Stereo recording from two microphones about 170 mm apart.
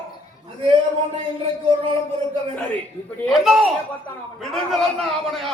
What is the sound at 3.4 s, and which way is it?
A man's voice, centre (ahead or behind).